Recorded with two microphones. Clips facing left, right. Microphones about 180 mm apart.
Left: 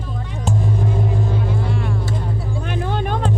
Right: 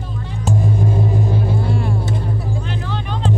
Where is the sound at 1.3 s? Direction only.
30° right (ahead or behind).